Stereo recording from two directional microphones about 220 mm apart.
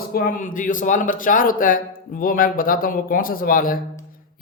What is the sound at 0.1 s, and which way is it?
Speech, 40° left (ahead or behind).